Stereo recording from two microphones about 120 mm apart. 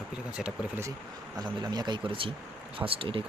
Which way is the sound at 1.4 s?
35° right (ahead or behind).